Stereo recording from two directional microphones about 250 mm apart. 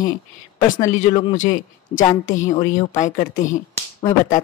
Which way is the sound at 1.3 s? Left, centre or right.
Left.